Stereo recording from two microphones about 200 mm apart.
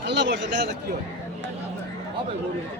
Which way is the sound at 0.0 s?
60° right (ahead or behind).